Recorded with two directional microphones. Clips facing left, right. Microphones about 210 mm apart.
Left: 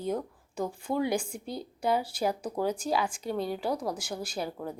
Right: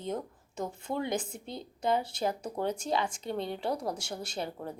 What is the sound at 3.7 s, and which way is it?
Speech, 25° right (ahead or behind).